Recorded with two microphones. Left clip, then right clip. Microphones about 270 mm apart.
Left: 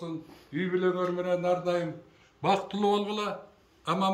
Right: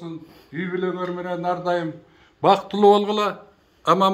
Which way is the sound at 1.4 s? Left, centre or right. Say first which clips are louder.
Right 9 dB; centre.